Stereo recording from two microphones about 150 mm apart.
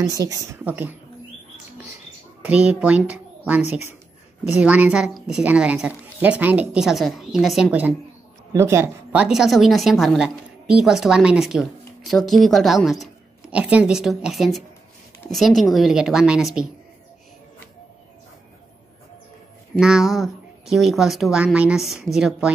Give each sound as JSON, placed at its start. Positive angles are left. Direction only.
{"t": 0.0, "sound": "a woman's voice", "side_deg": -25}
{"t": 2.4, "sound": "a child's voice", "side_deg": -10}
{"t": 8.5, "sound": "a woman's voice", "side_deg": -20}
{"t": 19.8, "sound": "a woman's voice", "side_deg": 0}